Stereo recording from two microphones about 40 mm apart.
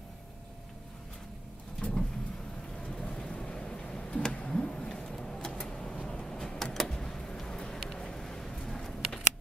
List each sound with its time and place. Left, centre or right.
1.8 s vehicle: left
3.4 s a sound: centre
4.5 s vehicle: centre